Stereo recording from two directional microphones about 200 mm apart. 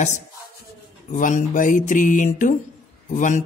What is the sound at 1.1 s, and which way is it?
Speech, 40° left (ahead or behind).